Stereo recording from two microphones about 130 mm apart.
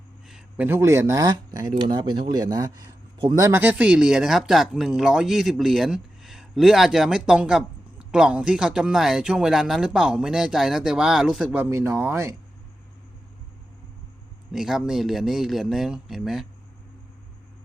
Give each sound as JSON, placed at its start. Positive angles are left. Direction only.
{"t": 0.3, "sound": "speech", "side_deg": -10}
{"t": 14.5, "sound": "speech", "side_deg": -5}